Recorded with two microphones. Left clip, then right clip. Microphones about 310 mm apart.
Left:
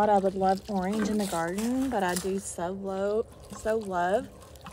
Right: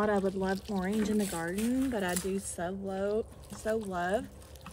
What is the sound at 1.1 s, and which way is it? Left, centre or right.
Speech, left.